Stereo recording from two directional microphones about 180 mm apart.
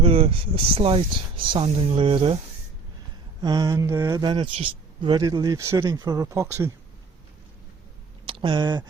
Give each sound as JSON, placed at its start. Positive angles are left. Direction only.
{"t": 0.0, "sound": "speech", "side_deg": -30}
{"t": 3.4, "sound": "speech", "side_deg": -20}
{"t": 8.3, "sound": "speech", "side_deg": -30}